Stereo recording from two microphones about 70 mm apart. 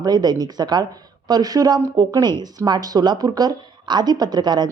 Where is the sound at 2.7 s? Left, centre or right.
Right.